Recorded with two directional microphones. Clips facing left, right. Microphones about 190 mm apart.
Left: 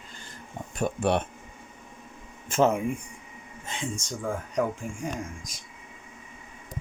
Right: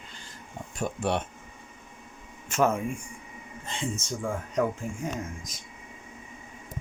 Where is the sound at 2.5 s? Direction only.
30° left (ahead or behind).